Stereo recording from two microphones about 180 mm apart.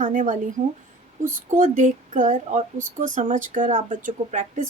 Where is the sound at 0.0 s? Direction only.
45° right (ahead or behind).